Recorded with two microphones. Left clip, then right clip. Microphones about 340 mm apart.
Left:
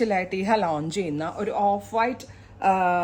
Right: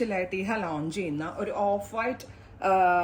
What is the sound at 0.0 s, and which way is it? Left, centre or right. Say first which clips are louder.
A woman's voice: left 5 dB; left.